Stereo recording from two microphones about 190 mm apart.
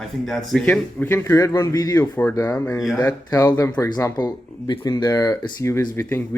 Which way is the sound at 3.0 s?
15° left (ahead or behind).